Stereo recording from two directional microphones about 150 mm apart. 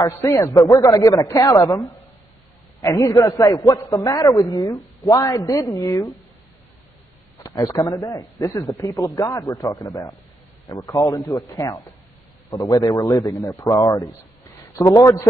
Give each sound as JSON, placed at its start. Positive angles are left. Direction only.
{"t": 0.0, "sound": "a man's voice", "side_deg": 25}
{"t": 7.4, "sound": "a man's voice", "side_deg": 25}